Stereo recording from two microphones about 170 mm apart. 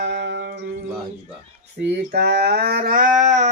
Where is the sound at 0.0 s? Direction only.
80° right.